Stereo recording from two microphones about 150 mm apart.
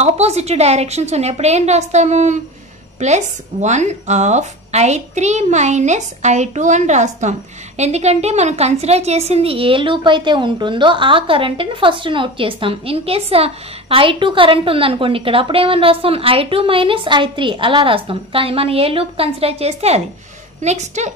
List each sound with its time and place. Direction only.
0.0 s a woman's voice: 45° right (ahead or behind)